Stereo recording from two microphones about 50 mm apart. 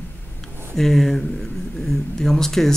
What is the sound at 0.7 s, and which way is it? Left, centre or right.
Speech, centre.